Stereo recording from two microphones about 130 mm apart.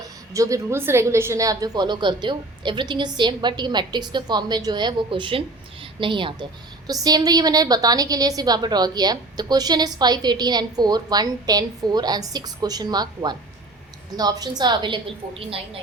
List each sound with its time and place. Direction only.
0.0 s a woman's voice: 25° right (ahead or behind); by 15.8 s 45° right (ahead or behind)